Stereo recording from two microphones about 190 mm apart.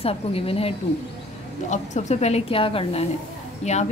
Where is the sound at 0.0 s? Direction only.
30° left (ahead or behind).